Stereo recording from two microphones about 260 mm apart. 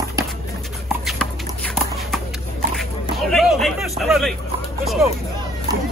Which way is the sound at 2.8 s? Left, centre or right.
Centre.